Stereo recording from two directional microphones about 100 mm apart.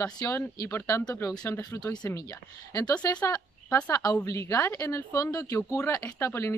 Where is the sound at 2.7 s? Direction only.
40° left (ahead or behind).